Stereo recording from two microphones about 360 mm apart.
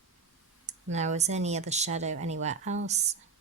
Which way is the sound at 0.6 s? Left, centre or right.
Centre.